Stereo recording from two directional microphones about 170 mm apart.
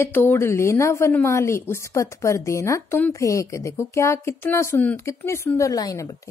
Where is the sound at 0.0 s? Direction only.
15° left (ahead or behind).